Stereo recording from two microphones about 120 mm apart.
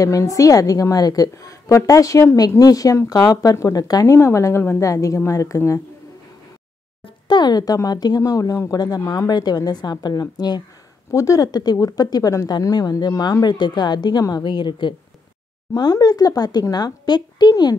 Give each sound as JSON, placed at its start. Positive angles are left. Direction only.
{"t": 0.0, "sound": "a woman's voice", "side_deg": 30}
{"t": 7.2, "sound": "speech", "side_deg": 35}